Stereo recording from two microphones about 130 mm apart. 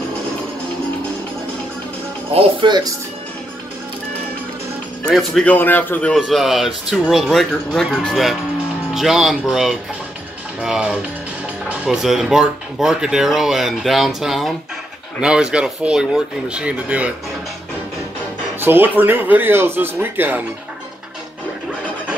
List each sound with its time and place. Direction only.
2.3 s speech: 35° right (ahead or behind)
5.0 s speech: 5° left (ahead or behind)
6.1 s speech: centre (ahead or behind)
18.6 s speech: 15° right (ahead or behind)